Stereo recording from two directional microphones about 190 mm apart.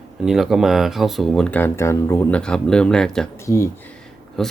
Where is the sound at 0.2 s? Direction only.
Centre (ahead or behind).